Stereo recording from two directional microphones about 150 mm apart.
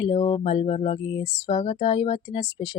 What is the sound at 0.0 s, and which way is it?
A woman's voice, 40° left (ahead or behind).